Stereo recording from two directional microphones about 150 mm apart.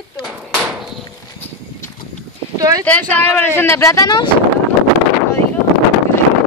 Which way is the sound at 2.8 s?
10° left (ahead or behind).